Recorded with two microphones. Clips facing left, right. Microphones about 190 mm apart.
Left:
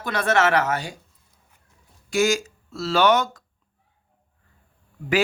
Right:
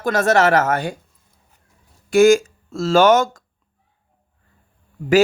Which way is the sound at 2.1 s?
55° right (ahead or behind).